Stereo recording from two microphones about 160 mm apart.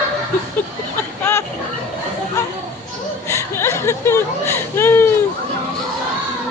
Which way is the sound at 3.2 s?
15° left (ahead or behind).